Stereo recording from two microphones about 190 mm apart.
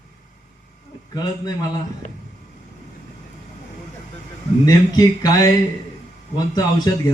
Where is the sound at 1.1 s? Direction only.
20° left (ahead or behind).